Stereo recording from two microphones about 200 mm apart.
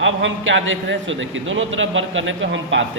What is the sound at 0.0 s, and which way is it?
A man's voice, 70° right (ahead or behind).